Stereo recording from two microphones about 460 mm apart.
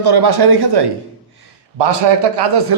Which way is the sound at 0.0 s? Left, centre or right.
Right.